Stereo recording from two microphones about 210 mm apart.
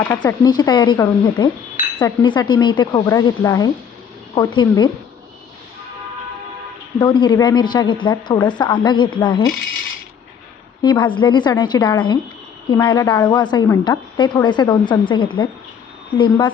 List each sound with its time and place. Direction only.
0.2 s speech: 20° left (ahead or behind)
7.0 s speech: 20° left (ahead or behind)
10.8 s speech: 20° left (ahead or behind)